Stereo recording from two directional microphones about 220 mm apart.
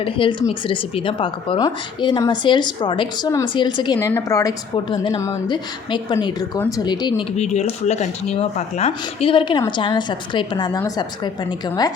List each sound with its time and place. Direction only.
0.0 s a woman's voice: 20° left (ahead or behind)
7.3 s a woman's voice: 30° left (ahead or behind)